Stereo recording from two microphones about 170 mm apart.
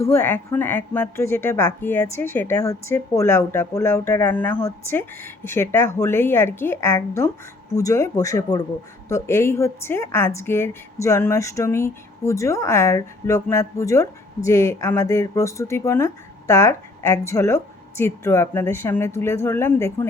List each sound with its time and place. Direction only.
0.0 s a woman's voice: 15° left (ahead or behind)